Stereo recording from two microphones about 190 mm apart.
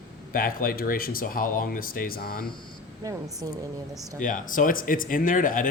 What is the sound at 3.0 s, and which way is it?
Speech, 20° right (ahead or behind).